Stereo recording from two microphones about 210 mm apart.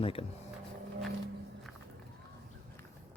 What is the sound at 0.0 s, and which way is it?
Speech, 25° left (ahead or behind).